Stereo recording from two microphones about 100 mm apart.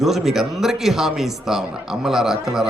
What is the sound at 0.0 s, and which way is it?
Speech, 5° right (ahead or behind).